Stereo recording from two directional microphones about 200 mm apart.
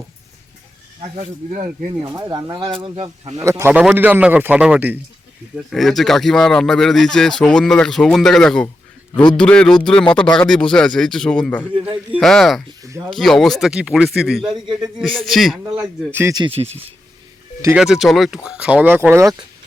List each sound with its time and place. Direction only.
1.1 s speech: 35° right (ahead or behind)
1.6 s speech: 20° right (ahead or behind)
3.4 s speech: 15° right (ahead or behind)
12.8 s speech: 15° right (ahead or behind)
13.1 s speech: centre (ahead or behind)
16.1 s speech: 15° right (ahead or behind)
17.6 s speech: 5° right (ahead or behind)